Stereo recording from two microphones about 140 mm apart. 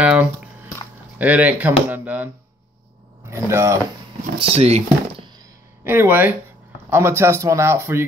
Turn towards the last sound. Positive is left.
turn(degrees=-20)  # may be behind; listen again after turning